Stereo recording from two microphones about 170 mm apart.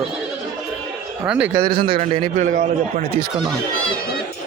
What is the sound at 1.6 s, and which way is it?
A man's voice, 60° right (ahead or behind).